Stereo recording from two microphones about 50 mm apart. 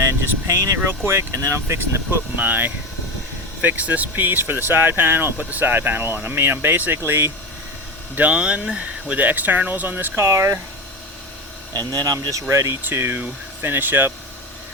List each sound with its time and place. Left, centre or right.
0.0 s speech: right
1.3 s speech: right
2.0 s speech: right
4.1 s speech: right
5.4 s speech: right
6.9 s speech: right
8.1 s speech: right
8.4 s speech: centre
10.2 s speech: right
12.3 s speech: right
12.8 s speech: right